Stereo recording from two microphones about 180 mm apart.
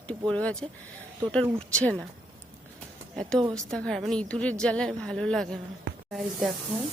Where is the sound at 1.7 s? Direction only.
5° left (ahead or behind).